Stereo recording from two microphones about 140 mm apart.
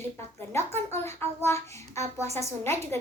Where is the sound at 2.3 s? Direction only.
50° right (ahead or behind).